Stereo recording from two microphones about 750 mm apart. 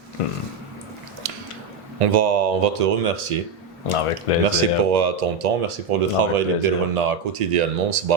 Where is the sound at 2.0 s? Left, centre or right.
Right.